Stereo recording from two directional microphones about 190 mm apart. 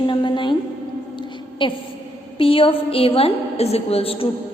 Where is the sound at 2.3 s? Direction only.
30° left (ahead or behind).